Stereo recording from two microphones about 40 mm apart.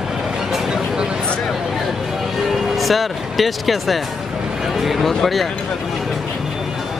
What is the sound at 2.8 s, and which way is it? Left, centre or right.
Speech, centre.